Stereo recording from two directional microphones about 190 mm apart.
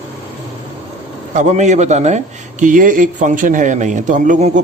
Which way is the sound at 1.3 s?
40° right (ahead or behind).